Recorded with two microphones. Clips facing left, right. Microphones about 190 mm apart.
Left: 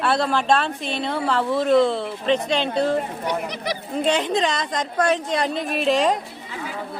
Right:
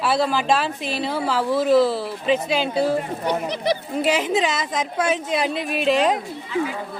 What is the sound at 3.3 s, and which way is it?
Speech, 30° right (ahead or behind).